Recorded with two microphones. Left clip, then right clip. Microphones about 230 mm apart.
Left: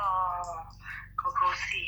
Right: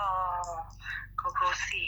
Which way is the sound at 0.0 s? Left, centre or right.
Right.